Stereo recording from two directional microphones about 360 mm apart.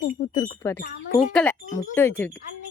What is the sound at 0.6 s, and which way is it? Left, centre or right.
Speech, centre.